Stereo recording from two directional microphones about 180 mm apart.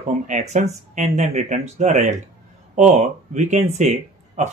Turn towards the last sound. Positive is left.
turn(degrees=-40)  # may be behind; listen again after turning